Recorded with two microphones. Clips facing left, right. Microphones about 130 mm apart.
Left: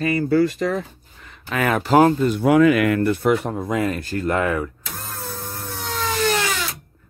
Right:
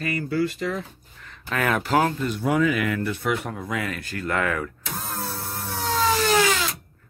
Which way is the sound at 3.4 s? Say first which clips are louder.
Left 7 dB; 30° left (ahead or behind).